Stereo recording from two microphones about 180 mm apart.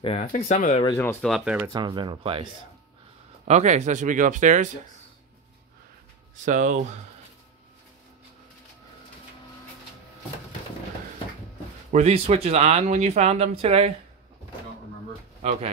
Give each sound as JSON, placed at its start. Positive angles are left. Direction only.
{"t": 0.0, "sound": "speech", "side_deg": 35}
{"t": 1.2, "sound": "speech", "side_deg": -5}
{"t": 1.7, "sound": "speech", "side_deg": -25}
{"t": 3.4, "sound": "speech", "side_deg": -40}
{"t": 6.3, "sound": "speech", "side_deg": -45}
{"t": 11.9, "sound": "speech", "side_deg": -35}
{"t": 15.4, "sound": "speech", "side_deg": -35}